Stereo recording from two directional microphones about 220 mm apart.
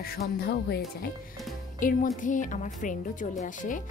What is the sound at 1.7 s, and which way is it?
A woman's voice, 35° left (ahead or behind).